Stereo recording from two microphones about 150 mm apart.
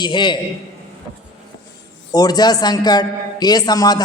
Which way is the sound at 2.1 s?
25° left (ahead or behind).